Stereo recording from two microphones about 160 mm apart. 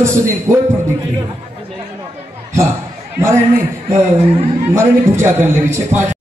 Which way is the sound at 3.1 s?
15° right (ahead or behind).